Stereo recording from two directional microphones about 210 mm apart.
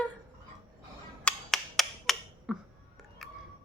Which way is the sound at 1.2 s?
Centre (ahead or behind).